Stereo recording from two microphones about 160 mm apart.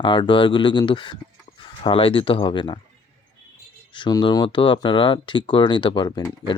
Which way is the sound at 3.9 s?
25° left (ahead or behind).